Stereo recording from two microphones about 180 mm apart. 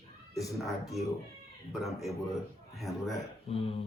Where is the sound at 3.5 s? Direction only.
30° left (ahead or behind).